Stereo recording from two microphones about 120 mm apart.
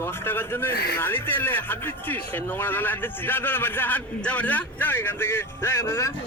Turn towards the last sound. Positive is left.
turn(degrees=20)  # may be behind; listen again after turning